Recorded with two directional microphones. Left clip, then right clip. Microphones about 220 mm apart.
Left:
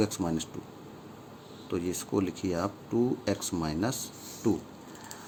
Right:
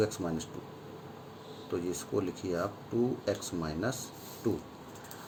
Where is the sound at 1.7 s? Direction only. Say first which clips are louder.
Left 2 dB; 40° left (ahead or behind).